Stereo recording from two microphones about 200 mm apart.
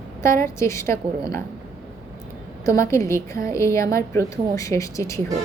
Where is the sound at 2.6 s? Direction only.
15° left (ahead or behind).